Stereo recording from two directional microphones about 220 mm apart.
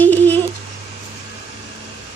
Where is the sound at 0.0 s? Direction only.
10° left (ahead or behind).